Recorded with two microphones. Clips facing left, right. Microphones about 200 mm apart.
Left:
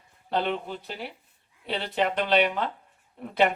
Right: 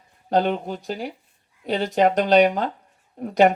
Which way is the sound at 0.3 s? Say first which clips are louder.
Right 6 dB; 40° right (ahead or behind).